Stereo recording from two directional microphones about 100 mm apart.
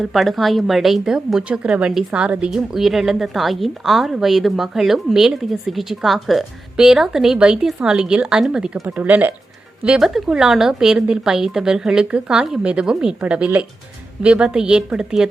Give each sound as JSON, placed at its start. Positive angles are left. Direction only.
{"t": 0.0, "sound": "a woman's voice", "side_deg": 0}